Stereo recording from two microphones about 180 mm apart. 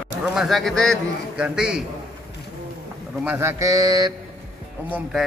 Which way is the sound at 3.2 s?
15° right (ahead or behind).